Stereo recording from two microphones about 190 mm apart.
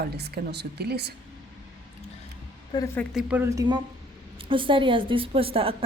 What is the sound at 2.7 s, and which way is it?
Speech, 20° left (ahead or behind).